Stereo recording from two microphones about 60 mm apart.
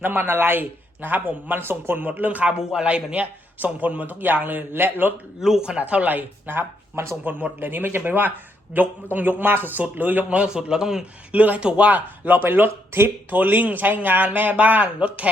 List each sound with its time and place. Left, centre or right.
0.0 s speech: right
5.4 s a man's voice: centre
5.8 s speech: right
7.3 s speech: right
10.2 s a man's voice: centre
11.3 s speech: right